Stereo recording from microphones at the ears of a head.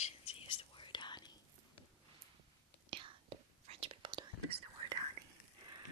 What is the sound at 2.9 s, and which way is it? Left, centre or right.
Whispering, right.